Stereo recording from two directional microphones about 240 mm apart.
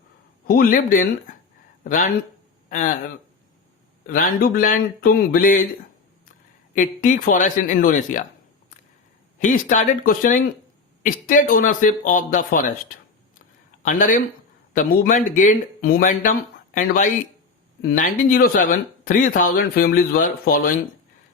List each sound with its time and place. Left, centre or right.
0.4 s speech: left
6.7 s speech: left
9.4 s speech: left
13.8 s speech: left